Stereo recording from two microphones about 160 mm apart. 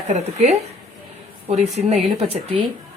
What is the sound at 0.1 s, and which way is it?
A woman's voice, 45° right (ahead or behind).